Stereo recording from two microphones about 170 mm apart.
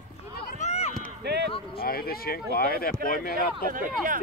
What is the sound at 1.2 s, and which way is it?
Speech, 75° right (ahead or behind).